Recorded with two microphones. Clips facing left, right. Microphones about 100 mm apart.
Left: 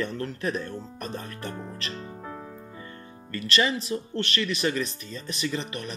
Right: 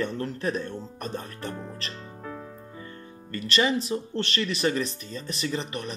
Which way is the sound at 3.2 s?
35° right (ahead or behind).